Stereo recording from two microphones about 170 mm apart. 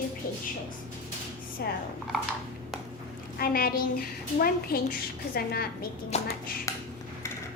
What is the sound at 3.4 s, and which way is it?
A woman's voice, 60° left (ahead or behind).